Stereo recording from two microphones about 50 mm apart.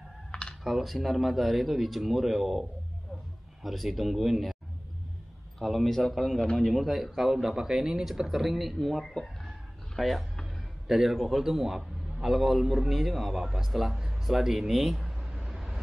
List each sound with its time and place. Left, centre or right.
0.3 s a sound: centre
0.7 s speech: centre
3.6 s speech: centre
5.6 s a man's voice: centre
15.2 s vehicle: centre